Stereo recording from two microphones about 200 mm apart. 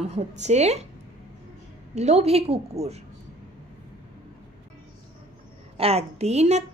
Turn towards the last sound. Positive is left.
turn(degrees=-35)  # may be behind; listen again after turning